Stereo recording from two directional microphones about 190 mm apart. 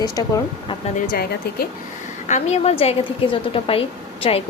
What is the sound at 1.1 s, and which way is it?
Speech, 55° left (ahead or behind).